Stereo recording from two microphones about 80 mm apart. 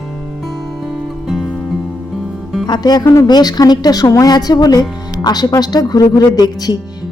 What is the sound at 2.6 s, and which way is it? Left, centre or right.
Speech, left.